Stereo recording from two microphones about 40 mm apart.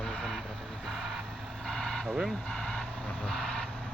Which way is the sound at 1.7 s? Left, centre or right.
Centre.